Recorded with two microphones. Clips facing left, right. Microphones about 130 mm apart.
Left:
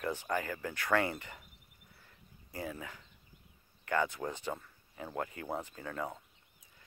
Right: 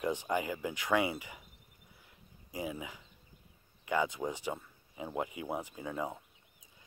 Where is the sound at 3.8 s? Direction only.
15° right (ahead or behind).